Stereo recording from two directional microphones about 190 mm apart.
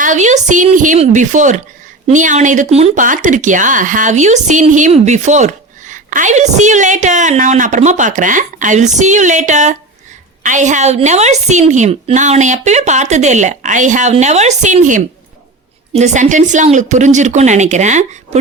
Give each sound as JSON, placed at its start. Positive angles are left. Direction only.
{"t": 0.0, "sound": "speech", "side_deg": -40}